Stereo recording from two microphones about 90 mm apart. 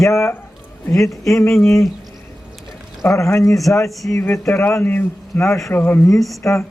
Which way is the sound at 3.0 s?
35° left (ahead or behind).